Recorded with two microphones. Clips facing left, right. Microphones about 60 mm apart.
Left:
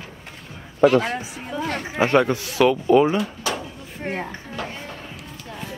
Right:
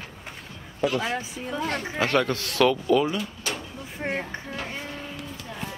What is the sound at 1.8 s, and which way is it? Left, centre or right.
Speech, left.